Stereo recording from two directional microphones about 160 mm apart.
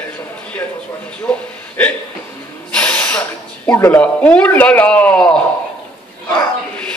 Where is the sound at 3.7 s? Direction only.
25° left (ahead or behind).